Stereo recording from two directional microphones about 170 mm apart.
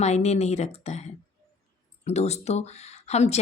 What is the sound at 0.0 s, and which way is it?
Speech, 40° left (ahead or behind).